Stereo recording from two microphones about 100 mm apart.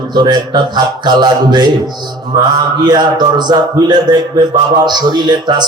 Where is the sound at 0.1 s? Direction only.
45° right (ahead or behind).